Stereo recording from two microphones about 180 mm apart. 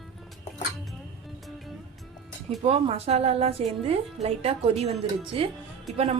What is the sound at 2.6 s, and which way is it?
A woman's voice, 35° right (ahead or behind).